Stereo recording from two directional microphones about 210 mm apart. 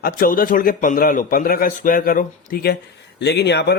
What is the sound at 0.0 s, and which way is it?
Speech, 40° left (ahead or behind).